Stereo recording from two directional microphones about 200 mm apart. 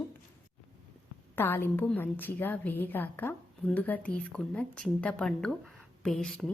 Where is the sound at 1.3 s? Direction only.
10° left (ahead or behind).